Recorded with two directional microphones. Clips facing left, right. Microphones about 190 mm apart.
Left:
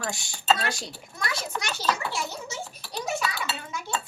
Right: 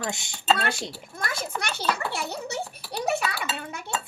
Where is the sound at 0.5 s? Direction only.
55° right (ahead or behind).